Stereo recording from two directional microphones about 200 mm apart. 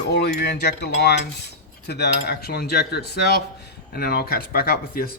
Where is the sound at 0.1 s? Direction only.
55° left (ahead or behind).